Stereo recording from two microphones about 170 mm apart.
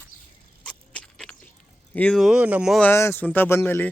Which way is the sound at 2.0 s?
5° left (ahead or behind).